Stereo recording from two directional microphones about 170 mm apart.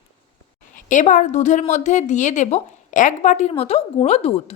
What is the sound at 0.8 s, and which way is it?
A woman's voice, 50° left (ahead or behind).